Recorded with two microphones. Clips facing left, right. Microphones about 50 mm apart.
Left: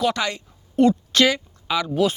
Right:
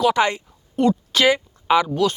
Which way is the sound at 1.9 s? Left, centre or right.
Centre.